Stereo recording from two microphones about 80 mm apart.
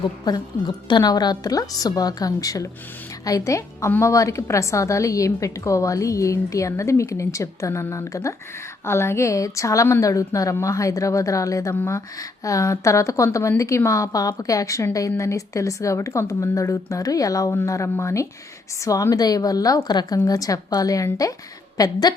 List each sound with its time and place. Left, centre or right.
0.0 s a woman's voice: left